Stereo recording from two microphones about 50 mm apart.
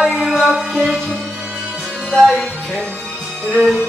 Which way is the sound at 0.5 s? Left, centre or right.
Centre.